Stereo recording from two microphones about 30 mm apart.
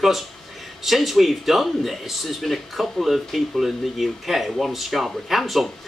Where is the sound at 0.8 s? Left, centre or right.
Centre.